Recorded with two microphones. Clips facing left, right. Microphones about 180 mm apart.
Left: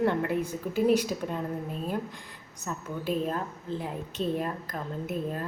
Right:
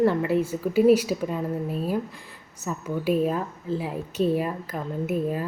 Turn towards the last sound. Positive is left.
turn(degrees=-10)  # may be behind; listen again after turning